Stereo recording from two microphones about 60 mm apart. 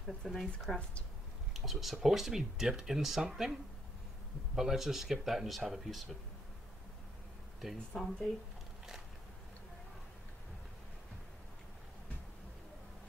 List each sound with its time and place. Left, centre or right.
0.2 s speech: centre
0.7 s speech: centre
1.5 s speech: centre
4.6 s speech: centre
7.9 s speech: centre